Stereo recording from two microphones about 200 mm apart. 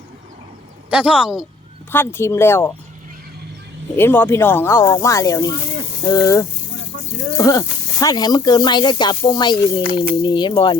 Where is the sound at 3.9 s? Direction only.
10° left (ahead or behind).